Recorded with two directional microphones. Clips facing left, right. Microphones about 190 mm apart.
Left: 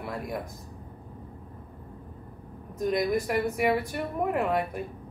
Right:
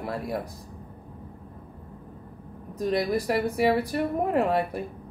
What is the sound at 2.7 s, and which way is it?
Speech, 30° right (ahead or behind).